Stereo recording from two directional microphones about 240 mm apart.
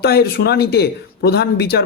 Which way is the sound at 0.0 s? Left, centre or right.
Left.